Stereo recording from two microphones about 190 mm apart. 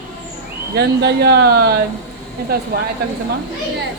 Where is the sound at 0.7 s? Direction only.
60° right (ahead or behind).